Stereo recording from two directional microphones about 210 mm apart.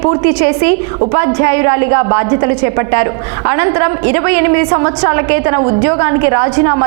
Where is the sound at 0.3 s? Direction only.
10° right (ahead or behind).